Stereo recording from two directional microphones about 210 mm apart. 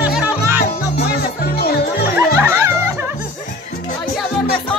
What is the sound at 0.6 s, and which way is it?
Music, 50° left (ahead or behind).